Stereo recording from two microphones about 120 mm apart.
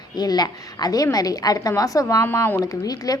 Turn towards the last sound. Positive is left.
turn(degrees=30)  # may be behind; listen again after turning